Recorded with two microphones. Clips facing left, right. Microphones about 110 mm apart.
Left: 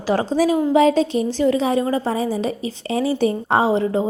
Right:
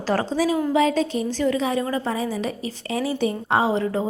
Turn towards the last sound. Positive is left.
turn(degrees=25)  # may be behind; listen again after turning